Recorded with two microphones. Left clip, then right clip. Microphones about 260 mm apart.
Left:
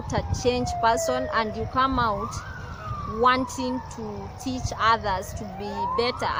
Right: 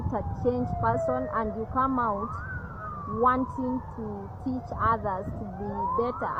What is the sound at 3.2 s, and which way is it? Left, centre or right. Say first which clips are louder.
Speech: left 3 dB; left.